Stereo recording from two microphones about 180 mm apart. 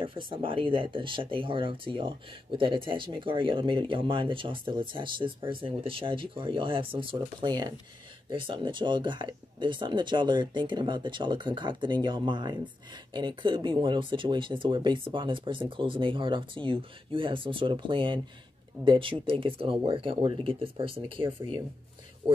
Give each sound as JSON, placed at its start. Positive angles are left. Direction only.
{"t": 0.0, "sound": "speech", "side_deg": -30}